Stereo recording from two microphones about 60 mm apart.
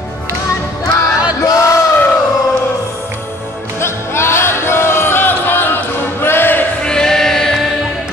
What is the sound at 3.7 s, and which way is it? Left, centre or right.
Music, left.